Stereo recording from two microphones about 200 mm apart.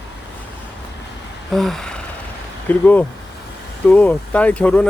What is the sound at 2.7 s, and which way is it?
Speech, 10° left (ahead or behind).